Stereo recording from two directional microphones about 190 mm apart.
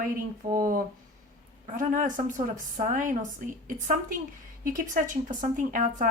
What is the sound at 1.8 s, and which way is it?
A woman's voice, 45° right (ahead or behind).